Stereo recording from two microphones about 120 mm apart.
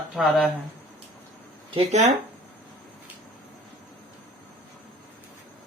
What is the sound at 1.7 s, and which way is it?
Speech, 70° right (ahead or behind).